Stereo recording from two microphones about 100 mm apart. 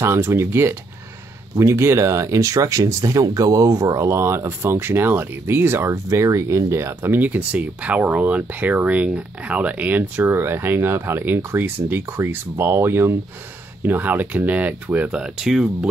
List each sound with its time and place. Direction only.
0.0 s speech: 25° right (ahead or behind); by 15.9 s 5° right (ahead or behind)